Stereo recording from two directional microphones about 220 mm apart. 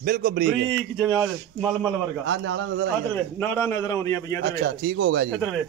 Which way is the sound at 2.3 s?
55° right (ahead or behind).